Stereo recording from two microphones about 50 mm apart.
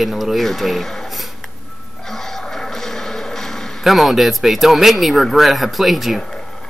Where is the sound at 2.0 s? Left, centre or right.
Centre.